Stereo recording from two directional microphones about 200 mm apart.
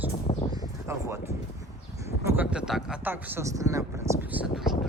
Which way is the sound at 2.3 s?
5° right (ahead or behind).